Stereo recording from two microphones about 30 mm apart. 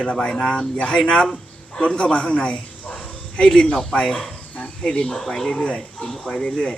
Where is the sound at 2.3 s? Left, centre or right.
Left.